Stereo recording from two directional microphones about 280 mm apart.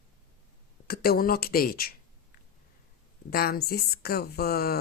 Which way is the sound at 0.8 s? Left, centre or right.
Left.